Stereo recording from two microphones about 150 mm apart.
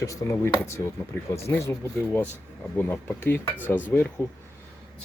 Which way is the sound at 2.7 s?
15° left (ahead or behind).